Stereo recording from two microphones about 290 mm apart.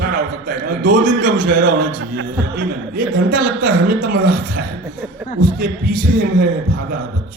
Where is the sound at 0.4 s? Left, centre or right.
Right.